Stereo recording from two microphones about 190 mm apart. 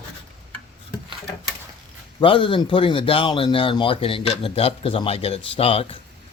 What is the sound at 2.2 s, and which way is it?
Speech, 25° left (ahead or behind).